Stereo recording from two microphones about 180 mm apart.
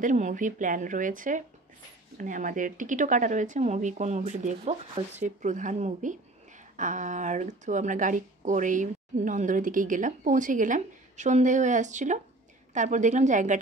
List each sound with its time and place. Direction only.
0.0 s speech: 45° right (ahead or behind)